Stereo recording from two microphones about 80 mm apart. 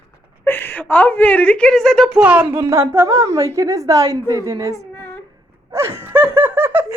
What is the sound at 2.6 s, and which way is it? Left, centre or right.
A woman's voice, right.